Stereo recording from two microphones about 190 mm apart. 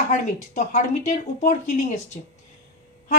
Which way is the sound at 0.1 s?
40° left (ahead or behind).